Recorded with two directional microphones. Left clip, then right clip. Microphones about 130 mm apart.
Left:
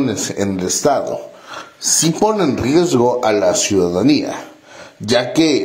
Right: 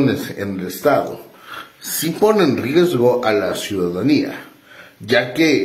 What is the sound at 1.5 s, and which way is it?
A man's voice, 15° left (ahead or behind).